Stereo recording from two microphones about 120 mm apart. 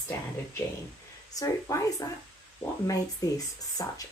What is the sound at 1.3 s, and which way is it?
Speech, 30° left (ahead or behind).